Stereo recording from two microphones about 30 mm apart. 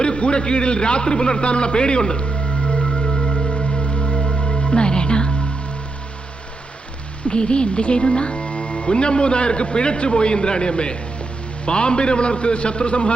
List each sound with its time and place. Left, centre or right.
0.0 s speech: left
2.2 s music: left
7.3 s speech: left